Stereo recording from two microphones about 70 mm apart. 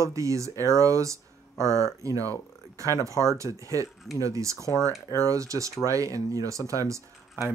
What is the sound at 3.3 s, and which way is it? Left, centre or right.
Speech, right.